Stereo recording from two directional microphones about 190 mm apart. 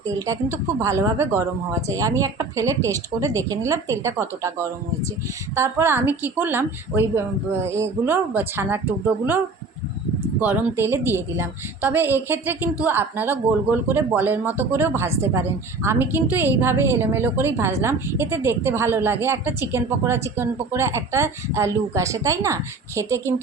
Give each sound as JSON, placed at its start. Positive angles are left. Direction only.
{"t": 0.3, "sound": "a woman's voice", "side_deg": -15}
{"t": 10.4, "sound": "a woman's voice", "side_deg": -10}